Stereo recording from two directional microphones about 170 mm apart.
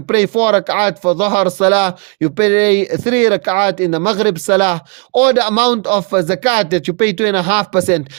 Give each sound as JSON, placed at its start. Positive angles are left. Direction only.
{"t": 0.1, "sound": "speech", "side_deg": -35}